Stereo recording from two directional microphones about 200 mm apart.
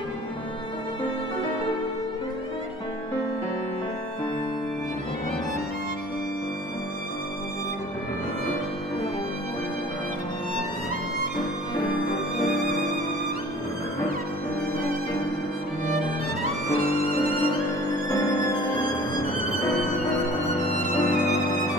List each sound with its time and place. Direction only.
16.7 s music: 30° left (ahead or behind)
20.4 s music: 40° left (ahead or behind)